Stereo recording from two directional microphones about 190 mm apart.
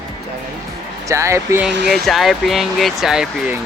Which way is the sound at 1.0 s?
15° right (ahead or behind).